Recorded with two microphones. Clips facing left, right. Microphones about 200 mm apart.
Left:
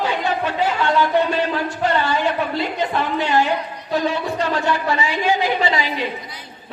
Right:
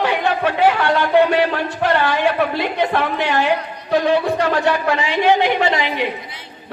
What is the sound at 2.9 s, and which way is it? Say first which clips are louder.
Speech: right 1 dB; 65° right (ahead or behind).